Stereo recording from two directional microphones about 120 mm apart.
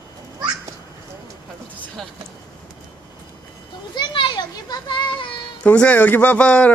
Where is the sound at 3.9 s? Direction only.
40° left (ahead or behind).